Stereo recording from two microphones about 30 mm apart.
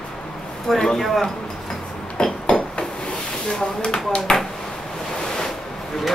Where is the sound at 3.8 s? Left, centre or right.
Left.